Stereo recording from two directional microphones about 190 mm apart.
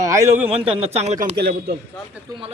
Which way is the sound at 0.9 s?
40° right (ahead or behind).